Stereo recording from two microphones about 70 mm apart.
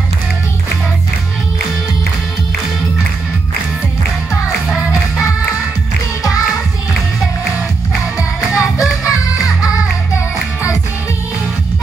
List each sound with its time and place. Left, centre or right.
8.2 s music: left